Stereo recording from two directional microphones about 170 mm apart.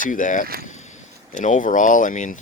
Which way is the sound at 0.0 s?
50° left (ahead or behind).